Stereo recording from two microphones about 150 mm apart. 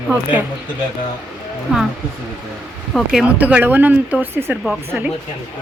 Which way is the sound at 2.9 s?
Centre (ahead or behind).